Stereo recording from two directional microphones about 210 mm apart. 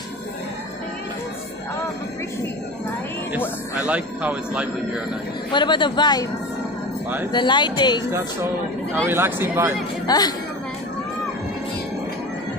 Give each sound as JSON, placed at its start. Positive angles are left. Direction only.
{"t": 3.8, "sound": "speech", "side_deg": -5}
{"t": 5.5, "sound": "speech", "side_deg": 20}
{"t": 7.2, "sound": "speech", "side_deg": 20}
{"t": 8.9, "sound": "speech", "side_deg": -10}
{"t": 10.0, "sound": "speech", "side_deg": 20}